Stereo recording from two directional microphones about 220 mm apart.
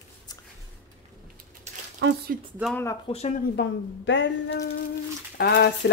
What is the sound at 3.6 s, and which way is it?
Speech, 50° left (ahead or behind).